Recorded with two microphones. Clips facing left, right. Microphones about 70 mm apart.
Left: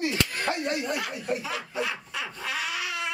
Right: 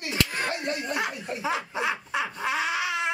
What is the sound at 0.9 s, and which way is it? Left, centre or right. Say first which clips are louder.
Speech: right 2 dB; right.